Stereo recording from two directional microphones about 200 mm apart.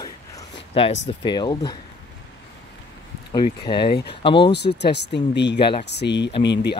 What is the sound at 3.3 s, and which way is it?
Speech, 25° left (ahead or behind).